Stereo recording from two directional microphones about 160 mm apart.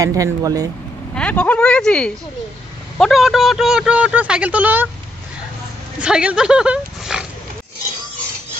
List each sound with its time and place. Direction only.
0.0 s speech: 20° right (ahead or behind)
1.1 s speech: 5° left (ahead or behind); by 4.8 s 10° right (ahead or behind)
5.9 s speech: 5° right (ahead or behind)